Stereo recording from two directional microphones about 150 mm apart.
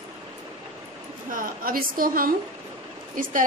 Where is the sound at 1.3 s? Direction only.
70° right (ahead or behind).